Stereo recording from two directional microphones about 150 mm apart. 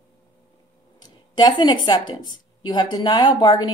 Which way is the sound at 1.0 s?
30° left (ahead or behind).